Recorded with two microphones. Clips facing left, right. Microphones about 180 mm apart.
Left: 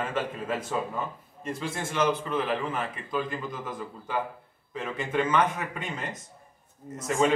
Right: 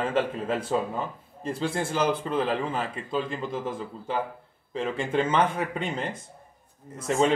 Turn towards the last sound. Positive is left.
turn(degrees=-30)  # may be behind; listen again after turning